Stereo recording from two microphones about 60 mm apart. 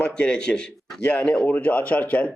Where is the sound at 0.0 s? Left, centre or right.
Centre.